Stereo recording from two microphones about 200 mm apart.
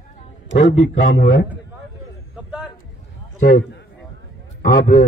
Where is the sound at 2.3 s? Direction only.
Centre (ahead or behind).